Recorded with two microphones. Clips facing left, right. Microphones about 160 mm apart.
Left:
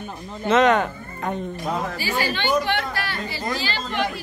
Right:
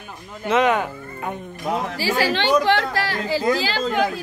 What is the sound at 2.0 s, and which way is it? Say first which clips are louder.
A woman's voice: right 4 dB; 90° right.